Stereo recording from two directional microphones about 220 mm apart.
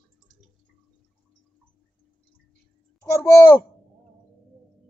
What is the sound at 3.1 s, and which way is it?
Speech, 15° left (ahead or behind).